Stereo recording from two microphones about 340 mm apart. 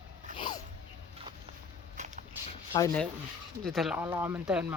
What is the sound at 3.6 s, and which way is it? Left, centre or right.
Speech, centre.